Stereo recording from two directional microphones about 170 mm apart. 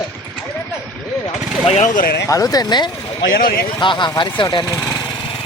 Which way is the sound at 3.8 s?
30° left (ahead or behind).